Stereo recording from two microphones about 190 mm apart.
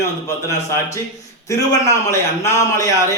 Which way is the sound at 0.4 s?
15° left (ahead or behind).